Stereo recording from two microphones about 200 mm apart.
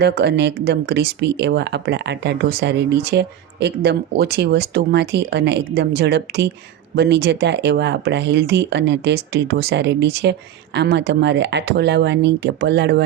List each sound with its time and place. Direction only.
0.0 s speech: 55° right (ahead or behind)